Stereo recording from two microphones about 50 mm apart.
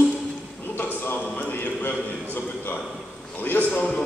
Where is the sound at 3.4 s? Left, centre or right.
Left.